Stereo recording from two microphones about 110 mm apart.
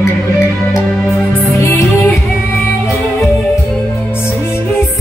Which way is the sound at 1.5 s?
25° left (ahead or behind).